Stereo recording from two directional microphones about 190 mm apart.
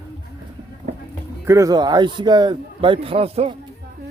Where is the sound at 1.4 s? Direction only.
15° right (ahead or behind).